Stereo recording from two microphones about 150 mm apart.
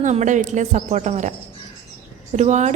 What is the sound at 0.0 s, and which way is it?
Speech, 50° right (ahead or behind).